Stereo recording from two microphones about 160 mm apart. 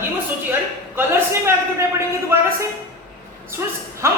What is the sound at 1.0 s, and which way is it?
Speech, 15° right (ahead or behind).